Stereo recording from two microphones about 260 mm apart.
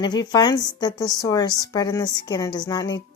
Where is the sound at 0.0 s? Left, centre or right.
Centre.